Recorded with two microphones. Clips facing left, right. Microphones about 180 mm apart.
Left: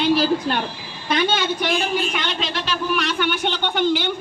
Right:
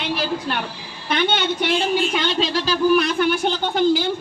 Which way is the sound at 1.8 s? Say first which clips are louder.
Right 3 dB; 30° right (ahead or behind).